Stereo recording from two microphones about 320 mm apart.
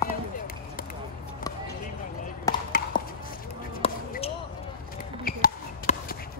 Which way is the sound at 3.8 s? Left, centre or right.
Centre.